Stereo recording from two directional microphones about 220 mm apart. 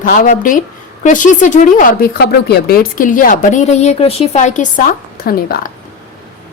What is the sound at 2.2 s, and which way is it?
A woman's voice, 50° left (ahead or behind).